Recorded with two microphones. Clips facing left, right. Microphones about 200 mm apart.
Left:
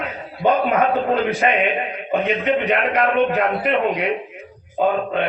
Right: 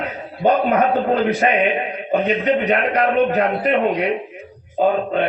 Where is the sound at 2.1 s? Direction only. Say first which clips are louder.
Right 2 dB; 40° right (ahead or behind).